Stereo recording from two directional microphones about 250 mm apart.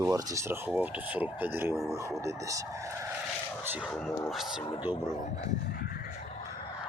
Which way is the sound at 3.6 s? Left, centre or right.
Centre.